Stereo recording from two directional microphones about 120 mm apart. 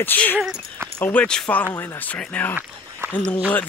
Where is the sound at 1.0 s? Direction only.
10° left (ahead or behind).